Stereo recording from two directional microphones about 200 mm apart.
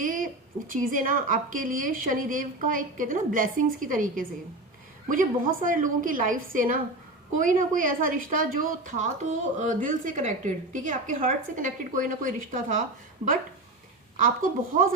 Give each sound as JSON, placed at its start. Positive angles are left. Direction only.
{"t": 0.0, "sound": "a sound", "side_deg": -40}
{"t": 0.7, "sound": "a woman's voice", "side_deg": -45}
{"t": 14.2, "sound": "a woman's voice", "side_deg": -45}